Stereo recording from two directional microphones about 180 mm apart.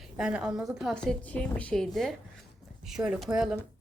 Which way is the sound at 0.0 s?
5° right (ahead or behind).